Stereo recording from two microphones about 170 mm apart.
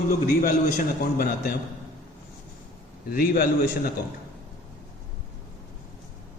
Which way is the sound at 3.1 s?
60° left (ahead or behind).